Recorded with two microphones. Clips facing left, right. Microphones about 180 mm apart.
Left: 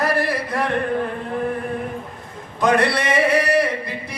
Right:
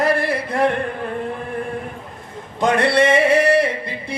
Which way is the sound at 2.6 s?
25° right (ahead or behind).